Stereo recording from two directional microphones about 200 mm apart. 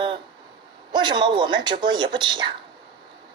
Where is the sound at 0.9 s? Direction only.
20° right (ahead or behind).